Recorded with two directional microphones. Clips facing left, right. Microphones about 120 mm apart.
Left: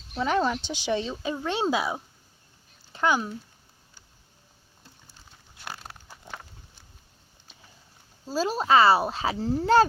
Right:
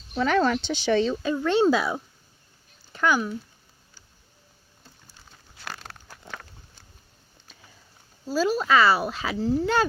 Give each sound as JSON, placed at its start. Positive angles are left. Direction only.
{"t": 0.2, "sound": "speech", "side_deg": 15}
{"t": 2.9, "sound": "speech", "side_deg": 25}
{"t": 5.8, "sound": "a sound", "side_deg": 5}
{"t": 8.3, "sound": "speech", "side_deg": 30}